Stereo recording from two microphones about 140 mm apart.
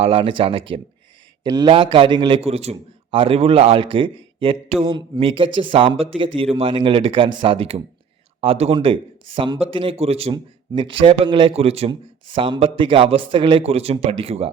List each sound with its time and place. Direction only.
0.0 s a man's voice: 40° right (ahead or behind)
1.5 s speech: 25° right (ahead or behind)
1.7 s a man's voice: 40° right (ahead or behind)